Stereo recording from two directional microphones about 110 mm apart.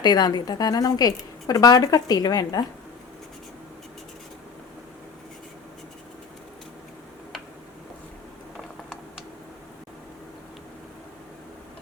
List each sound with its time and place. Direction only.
0.0 s speech: 40° left (ahead or behind)